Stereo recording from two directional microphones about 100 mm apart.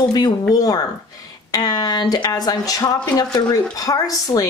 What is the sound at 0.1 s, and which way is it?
A woman's voice, 40° left (ahead or behind).